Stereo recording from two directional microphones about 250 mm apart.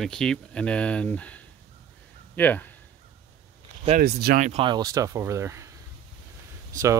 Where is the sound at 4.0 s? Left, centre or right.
Right; by 5.7 s centre.